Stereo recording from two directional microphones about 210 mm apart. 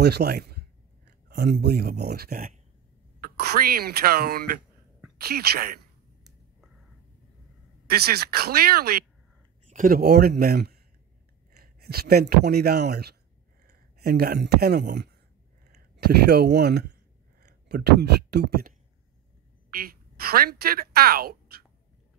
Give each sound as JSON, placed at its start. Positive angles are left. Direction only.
{"t": 0.0, "sound": "speech", "side_deg": -50}
{"t": 7.9, "sound": "speech", "side_deg": -50}
{"t": 16.3, "sound": "speech", "side_deg": -50}
{"t": 19.7, "sound": "a woman's voice", "side_deg": -45}